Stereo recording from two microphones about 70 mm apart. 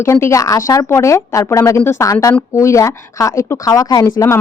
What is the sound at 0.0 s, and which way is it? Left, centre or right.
Speech, left.